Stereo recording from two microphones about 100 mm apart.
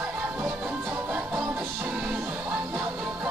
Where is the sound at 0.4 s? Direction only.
20° right (ahead or behind).